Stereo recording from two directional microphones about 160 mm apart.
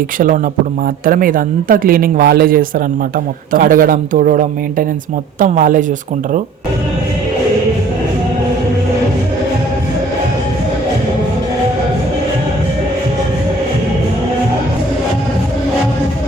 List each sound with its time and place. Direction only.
1.0 s speech: 60° right (ahead or behind)